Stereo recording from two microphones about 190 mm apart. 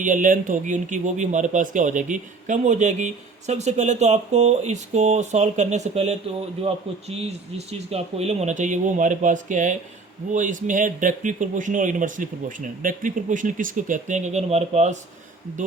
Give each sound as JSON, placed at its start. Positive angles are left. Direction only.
{"t": 0.0, "sound": "speech", "side_deg": -45}